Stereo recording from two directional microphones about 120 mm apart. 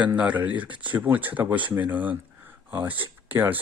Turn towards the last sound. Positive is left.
turn(degrees=-15)  # may be behind; listen again after turning